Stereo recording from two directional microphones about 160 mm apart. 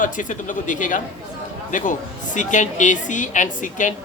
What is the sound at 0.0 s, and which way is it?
Speech, 55° left (ahead or behind).